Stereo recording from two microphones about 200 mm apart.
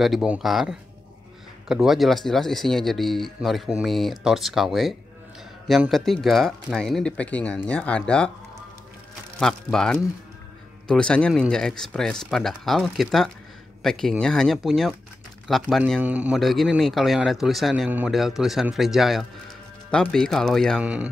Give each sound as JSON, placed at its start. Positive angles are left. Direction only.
{"t": 0.0, "sound": "speech", "side_deg": 0}
{"t": 9.4, "sound": "speech", "side_deg": 5}